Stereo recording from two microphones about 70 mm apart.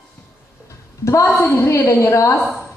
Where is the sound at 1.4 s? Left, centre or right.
Left.